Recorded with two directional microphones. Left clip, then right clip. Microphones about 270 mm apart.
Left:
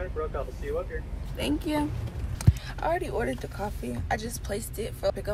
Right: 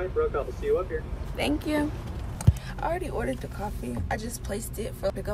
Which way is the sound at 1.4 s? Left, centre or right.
Centre.